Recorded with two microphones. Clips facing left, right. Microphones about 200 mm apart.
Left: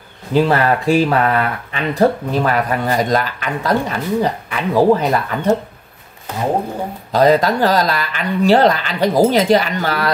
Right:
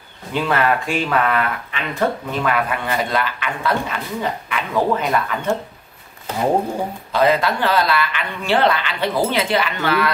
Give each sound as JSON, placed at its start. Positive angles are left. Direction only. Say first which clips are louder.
{"t": 0.3, "sound": "speech", "louder": "left 5 dB", "side_deg": 35}
{"t": 7.1, "sound": "speech", "louder": "left 5 dB", "side_deg": 40}